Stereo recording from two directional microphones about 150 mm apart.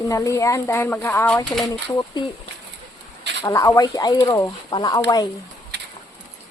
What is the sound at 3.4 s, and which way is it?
Speech, 20° left (ahead or behind).